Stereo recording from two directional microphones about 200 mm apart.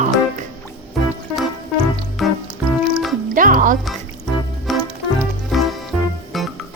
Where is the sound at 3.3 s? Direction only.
40° right (ahead or behind).